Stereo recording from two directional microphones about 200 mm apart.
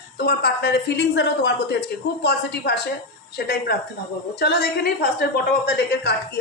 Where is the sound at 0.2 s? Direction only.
55° left (ahead or behind).